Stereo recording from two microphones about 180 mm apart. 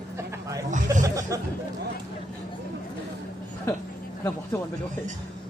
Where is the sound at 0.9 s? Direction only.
20° right (ahead or behind).